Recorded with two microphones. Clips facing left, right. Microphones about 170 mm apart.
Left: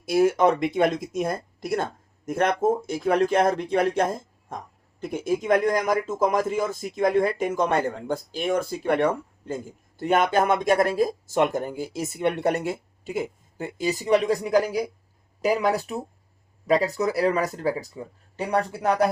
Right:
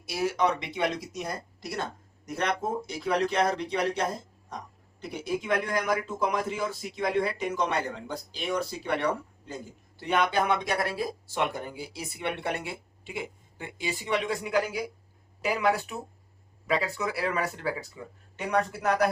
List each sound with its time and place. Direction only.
0.0 s speech: 50° left (ahead or behind); by 19.0 s 30° left (ahead or behind)